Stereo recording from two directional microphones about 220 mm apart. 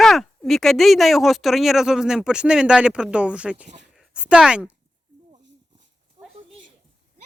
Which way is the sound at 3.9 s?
5° right (ahead or behind).